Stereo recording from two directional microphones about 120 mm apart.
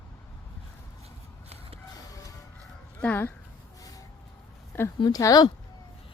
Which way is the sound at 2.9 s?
15° left (ahead or behind).